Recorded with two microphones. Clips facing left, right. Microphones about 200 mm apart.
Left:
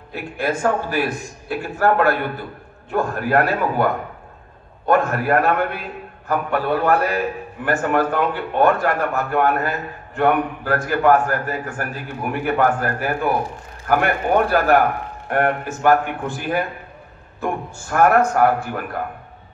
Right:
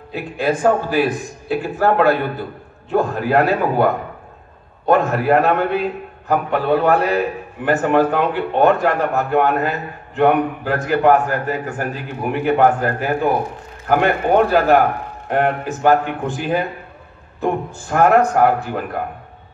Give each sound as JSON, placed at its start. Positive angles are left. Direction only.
{"t": 0.1, "sound": "a man's voice", "side_deg": -15}
{"t": 4.8, "sound": "a man's voice", "side_deg": -20}